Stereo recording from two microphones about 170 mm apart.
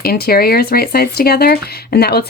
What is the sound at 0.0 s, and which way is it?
Speech, 65° left (ahead or behind).